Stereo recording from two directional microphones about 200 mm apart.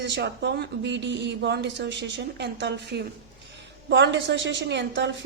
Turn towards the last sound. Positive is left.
turn(degrees=-60)  # may be behind; listen again after turning